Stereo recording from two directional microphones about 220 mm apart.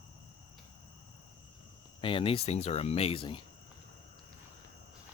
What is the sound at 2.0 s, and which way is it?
Speech, 25° left (ahead or behind).